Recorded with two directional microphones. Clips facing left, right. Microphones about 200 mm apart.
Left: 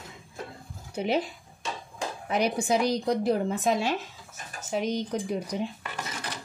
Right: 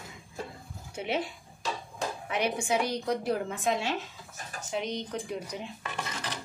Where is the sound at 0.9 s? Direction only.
35° left (ahead or behind).